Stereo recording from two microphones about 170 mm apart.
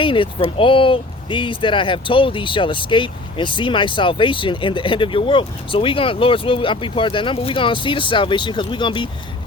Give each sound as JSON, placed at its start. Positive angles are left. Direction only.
{"t": 0.0, "sound": "speech", "side_deg": 30}